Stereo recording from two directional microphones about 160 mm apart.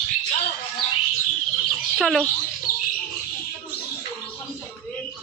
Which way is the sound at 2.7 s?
55° left (ahead or behind).